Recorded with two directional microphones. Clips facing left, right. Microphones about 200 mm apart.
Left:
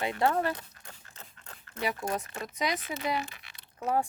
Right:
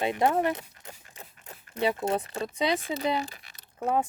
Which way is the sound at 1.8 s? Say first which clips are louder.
Right 6 dB; 25° right (ahead or behind).